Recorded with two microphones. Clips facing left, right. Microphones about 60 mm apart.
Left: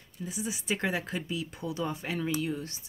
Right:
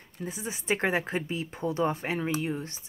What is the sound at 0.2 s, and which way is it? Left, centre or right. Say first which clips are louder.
A woman's voice: even; right.